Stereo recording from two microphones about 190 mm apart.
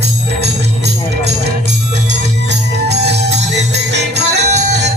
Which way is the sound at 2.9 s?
65° right (ahead or behind).